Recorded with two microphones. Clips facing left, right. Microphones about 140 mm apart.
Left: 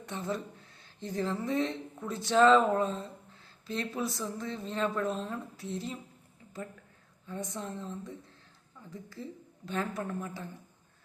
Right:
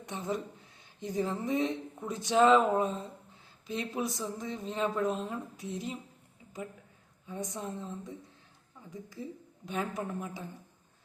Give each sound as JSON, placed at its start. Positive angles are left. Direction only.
{"t": 0.0, "sound": "speech", "side_deg": -15}
{"t": 7.3, "sound": "speech", "side_deg": -15}